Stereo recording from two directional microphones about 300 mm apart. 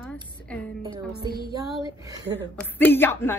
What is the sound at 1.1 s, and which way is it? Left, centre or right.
Music, right.